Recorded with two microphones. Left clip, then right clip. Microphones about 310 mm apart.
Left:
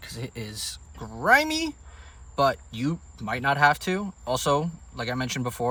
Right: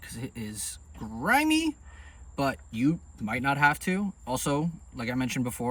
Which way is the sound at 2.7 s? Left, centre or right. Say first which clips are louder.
Right 3 dB; centre.